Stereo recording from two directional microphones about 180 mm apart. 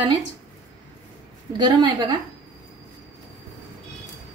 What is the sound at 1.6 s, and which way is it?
Speech, 25° right (ahead or behind).